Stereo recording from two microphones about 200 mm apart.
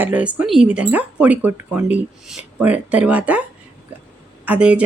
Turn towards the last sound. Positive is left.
turn(degrees=-5)  # may be behind; listen again after turning